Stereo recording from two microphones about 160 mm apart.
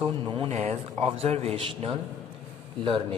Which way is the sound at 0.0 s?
35° right (ahead or behind).